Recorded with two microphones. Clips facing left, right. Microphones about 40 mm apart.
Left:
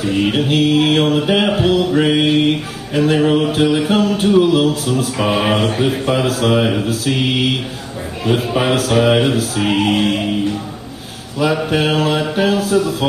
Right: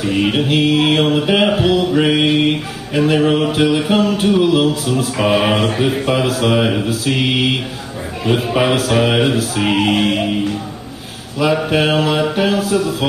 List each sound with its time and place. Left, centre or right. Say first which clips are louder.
0.0 s mantra: even; centre
4.2 s music: left 1 dB; centre
4.9 s mantra: right 1 dB; centre
5.7 s music: even; centre
7.1 s mantra: right 1 dB; centre
8.3 s music: right 1 dB; centre
11.3 s mantra: right 1 dB; centre
12.5 s mantra: left 1 dB; centre